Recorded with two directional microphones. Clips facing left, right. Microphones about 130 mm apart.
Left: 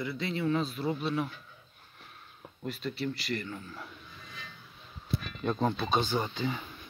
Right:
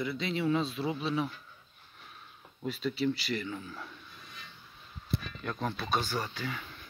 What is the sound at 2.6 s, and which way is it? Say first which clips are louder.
Speech: right 3 dB; centre (ahead or behind).